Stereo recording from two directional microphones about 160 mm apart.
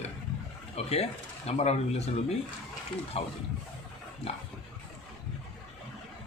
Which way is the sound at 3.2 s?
40° left (ahead or behind).